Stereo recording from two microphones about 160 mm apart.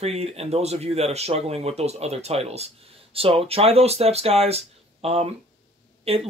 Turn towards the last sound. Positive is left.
turn(degrees=-40)  # may be behind; listen again after turning